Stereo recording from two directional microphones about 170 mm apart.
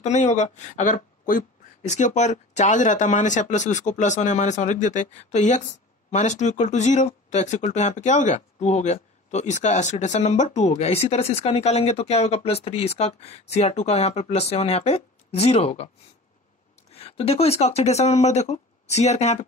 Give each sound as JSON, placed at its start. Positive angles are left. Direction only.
{"t": 0.0, "sound": "speech", "side_deg": 40}
{"t": 16.9, "sound": "speech", "side_deg": 35}